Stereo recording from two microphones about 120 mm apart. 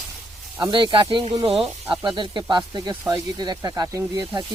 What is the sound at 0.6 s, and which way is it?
Speech, 40° right (ahead or behind).